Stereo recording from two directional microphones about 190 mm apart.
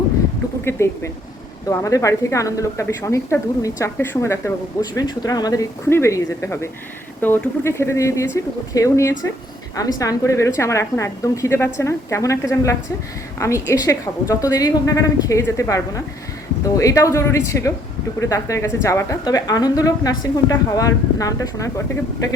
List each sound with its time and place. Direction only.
0.6 s a woman's voice: 15° left (ahead or behind)